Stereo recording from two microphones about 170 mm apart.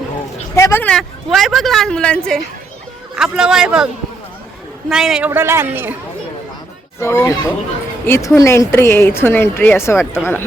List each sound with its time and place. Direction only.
0.5 s a woman's voice: 15° left (ahead or behind); by 3.8 s 5° right (ahead or behind)
4.9 s a man's voice: 5° right (ahead or behind)
7.0 s a woman's voice: 15° left (ahead or behind)